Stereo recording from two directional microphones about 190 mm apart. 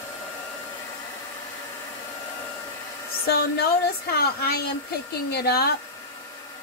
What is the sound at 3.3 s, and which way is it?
A woman's voice, 60° left (ahead or behind).